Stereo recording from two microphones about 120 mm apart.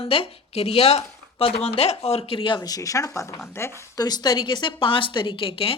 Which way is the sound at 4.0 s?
35° left (ahead or behind).